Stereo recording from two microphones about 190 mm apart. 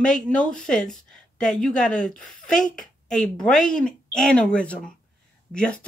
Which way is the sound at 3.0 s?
Centre (ahead or behind).